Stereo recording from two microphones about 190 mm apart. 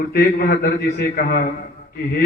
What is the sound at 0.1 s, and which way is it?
A man's voice, 50° left (ahead or behind).